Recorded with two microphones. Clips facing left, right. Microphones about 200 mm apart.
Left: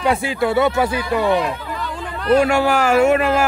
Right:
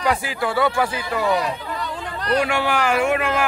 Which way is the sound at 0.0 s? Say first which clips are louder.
Left 4 dB; 25° left (ahead or behind).